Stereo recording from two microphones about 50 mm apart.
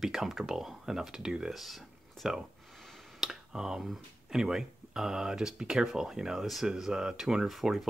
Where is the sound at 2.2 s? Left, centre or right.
Centre.